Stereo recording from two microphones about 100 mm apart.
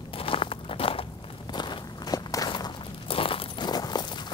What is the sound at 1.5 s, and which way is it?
Walk, 50° left (ahead or behind).